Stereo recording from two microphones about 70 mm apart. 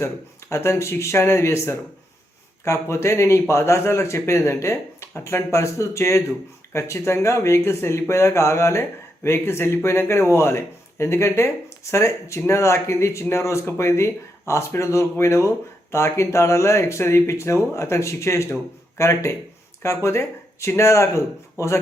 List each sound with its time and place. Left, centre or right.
0.5 s speech: left